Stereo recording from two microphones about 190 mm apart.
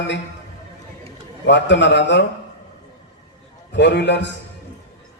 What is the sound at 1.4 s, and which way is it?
Speech, 70° left (ahead or behind).